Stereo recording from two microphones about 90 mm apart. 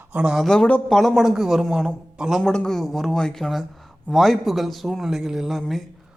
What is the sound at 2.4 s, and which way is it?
Speech, 10° left (ahead or behind).